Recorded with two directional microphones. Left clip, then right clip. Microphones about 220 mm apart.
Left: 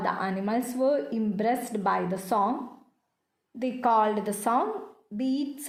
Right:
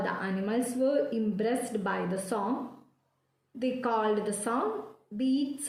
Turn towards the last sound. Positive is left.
turn(degrees=40)  # may be behind; listen again after turning